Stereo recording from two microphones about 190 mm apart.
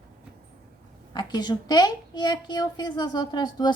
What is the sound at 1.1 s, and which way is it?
A woman's voice, 20° left (ahead or behind).